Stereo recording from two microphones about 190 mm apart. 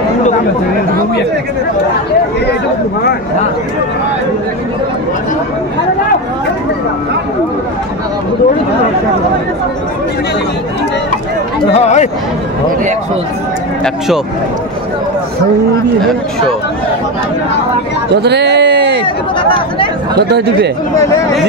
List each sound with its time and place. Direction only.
11.7 s speech: 35° left (ahead or behind)
18.1 s a sound: 60° right (ahead or behind)
20.2 s speech: 60° right (ahead or behind)